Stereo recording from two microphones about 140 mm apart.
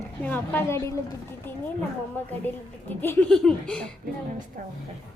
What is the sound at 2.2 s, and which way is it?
A woman's voice, 10° left (ahead or behind).